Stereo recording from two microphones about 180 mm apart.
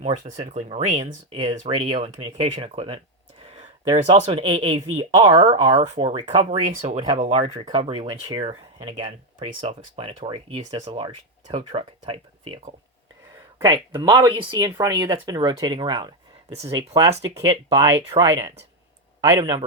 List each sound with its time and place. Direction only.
0.0 s speech: 40° right (ahead or behind); by 19.6 s 25° right (ahead or behind)